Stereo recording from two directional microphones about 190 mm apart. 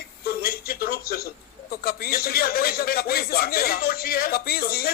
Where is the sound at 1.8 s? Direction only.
55° left (ahead or behind).